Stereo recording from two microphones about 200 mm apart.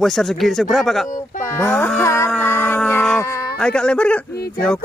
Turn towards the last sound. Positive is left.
turn(degrees=5)  # may be behind; listen again after turning